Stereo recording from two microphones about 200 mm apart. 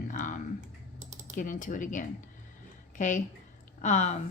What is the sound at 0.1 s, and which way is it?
Typing, 40° left (ahead or behind).